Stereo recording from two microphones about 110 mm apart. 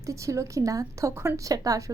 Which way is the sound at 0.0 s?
30° right (ahead or behind).